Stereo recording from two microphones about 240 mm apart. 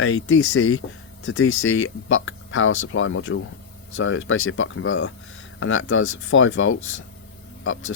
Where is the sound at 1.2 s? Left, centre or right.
Left.